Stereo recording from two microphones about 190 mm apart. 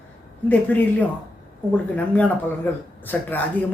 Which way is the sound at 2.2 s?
10° left (ahead or behind).